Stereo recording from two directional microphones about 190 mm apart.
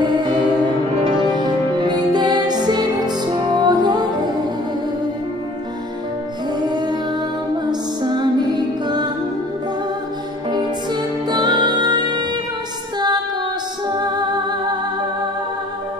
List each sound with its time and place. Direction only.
0.0 s music: 20° right (ahead or behind)
6.7 s music: 20° right (ahead or behind)
8.0 s music: 20° right (ahead or behind)
10.5 s music: 20° right (ahead or behind)
13.9 s music: 20° right (ahead or behind)